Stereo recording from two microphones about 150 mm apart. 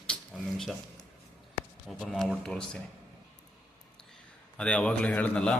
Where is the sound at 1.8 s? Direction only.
Centre (ahead or behind).